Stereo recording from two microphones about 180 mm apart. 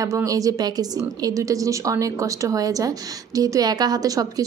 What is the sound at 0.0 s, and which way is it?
A woman's voice, 20° right (ahead or behind).